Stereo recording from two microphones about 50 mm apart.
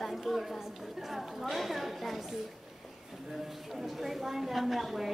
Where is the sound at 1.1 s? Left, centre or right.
Centre.